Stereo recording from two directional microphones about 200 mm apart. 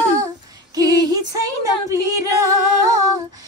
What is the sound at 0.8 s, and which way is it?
Music, 20° right (ahead or behind).